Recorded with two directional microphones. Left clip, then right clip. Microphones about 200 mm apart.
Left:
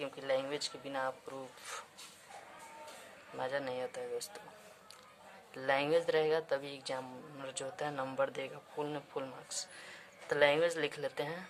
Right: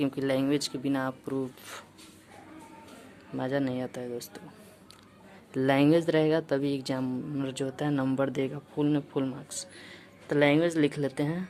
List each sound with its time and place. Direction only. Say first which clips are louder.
0.0 s speech: right 7 dB; 35° right (ahead or behind)
3.3 s a woman's voice: right 7 dB; 25° right (ahead or behind)
5.5 s a woman's voice: right 8 dB; 30° right (ahead or behind)